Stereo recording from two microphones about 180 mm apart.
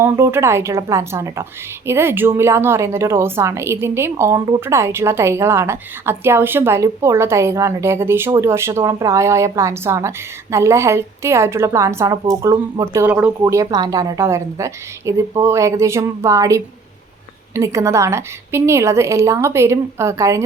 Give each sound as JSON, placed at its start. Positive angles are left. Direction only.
{"t": 0.0, "sound": "a woman's voice", "side_deg": -15}